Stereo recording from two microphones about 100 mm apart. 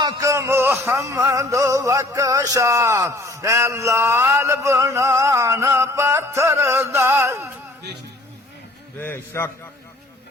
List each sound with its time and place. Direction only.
0.2 s a sound: 30° right (ahead or behind)
0.9 s music: 30° right (ahead or behind)
9.0 s a man's voice: 25° left (ahead or behind)